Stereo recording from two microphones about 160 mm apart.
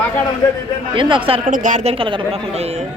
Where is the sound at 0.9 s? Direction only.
30° right (ahead or behind).